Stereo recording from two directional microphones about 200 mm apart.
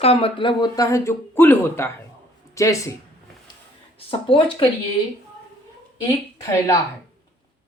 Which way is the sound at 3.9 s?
25° left (ahead or behind).